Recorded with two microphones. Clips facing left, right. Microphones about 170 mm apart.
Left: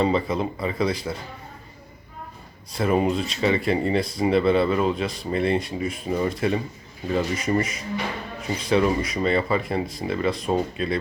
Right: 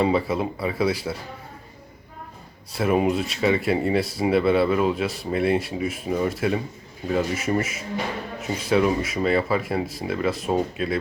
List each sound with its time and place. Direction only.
0.0 s speech: 5° right (ahead or behind)
2.7 s speech: 5° right (ahead or behind)